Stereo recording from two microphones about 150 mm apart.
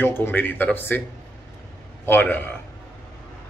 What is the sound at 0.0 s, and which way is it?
Speech, 15° left (ahead or behind).